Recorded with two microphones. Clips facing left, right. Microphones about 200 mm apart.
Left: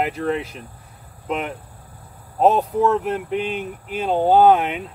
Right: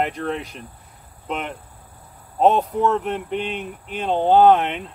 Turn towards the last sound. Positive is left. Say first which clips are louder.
# even
turn(degrees=5)  # may be behind; listen again after turning